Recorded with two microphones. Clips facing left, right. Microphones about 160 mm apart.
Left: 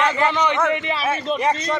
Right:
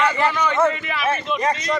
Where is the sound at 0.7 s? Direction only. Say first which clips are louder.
Left 3 dB; 20° left (ahead or behind).